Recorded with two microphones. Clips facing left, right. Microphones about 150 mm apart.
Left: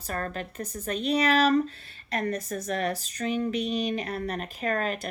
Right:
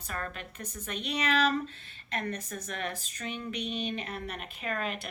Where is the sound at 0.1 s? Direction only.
40° left (ahead or behind).